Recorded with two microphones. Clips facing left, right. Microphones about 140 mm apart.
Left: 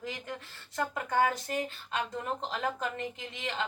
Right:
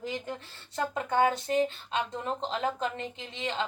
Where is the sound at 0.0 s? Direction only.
25° right (ahead or behind).